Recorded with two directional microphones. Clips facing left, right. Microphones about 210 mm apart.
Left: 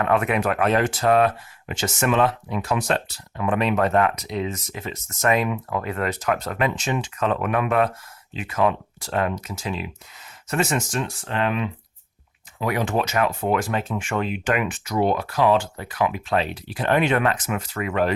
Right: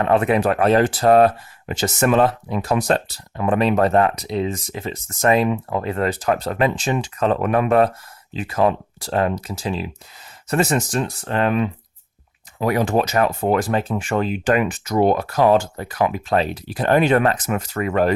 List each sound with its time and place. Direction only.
0.0 s speech: 30° right (ahead or behind)